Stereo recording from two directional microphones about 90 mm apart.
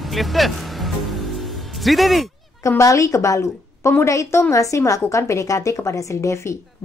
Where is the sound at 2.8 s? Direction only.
35° left (ahead or behind).